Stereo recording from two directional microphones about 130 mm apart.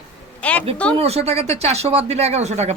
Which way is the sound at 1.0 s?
55° right (ahead or behind).